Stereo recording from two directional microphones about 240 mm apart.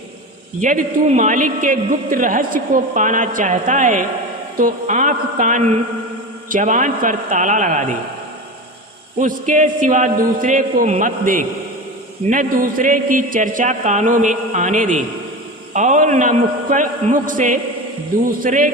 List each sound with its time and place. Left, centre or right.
0.6 s a man's voice: right
9.2 s a man's voice: right